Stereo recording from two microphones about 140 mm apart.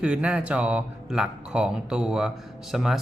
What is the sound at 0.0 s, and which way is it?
Speech, 10° right (ahead or behind).